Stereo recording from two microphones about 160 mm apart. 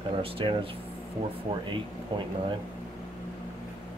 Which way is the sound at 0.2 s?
35° right (ahead or behind).